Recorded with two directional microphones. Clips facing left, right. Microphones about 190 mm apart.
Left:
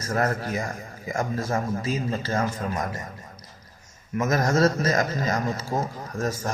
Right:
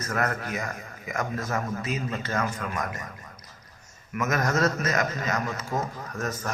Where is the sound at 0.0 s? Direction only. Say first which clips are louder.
Left 3 dB; 30° left (ahead or behind).